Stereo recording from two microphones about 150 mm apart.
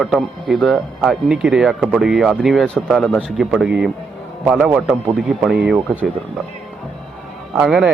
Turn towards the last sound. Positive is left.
turn(degrees=0)  # may be behind; listen again after turning